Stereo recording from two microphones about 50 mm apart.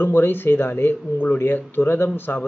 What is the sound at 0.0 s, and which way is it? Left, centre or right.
Speech, left.